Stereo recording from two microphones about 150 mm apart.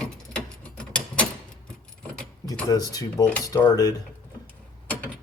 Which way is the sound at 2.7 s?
25° left (ahead or behind).